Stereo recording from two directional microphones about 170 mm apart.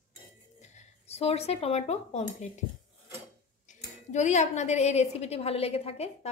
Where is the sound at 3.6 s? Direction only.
45° left (ahead or behind).